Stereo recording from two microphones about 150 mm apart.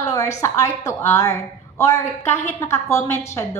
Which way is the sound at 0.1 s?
20° left (ahead or behind).